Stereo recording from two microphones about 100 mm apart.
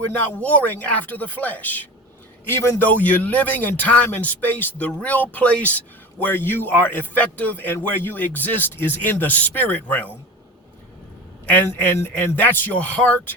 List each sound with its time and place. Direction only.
0.1 s a man's voice: 15° left (ahead or behind)
11.4 s speech: 15° left (ahead or behind)